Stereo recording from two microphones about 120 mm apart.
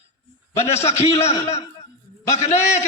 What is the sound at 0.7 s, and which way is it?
Speech, 60° left (ahead or behind).